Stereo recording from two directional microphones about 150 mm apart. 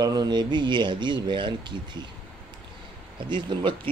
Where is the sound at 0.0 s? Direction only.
25° right (ahead or behind).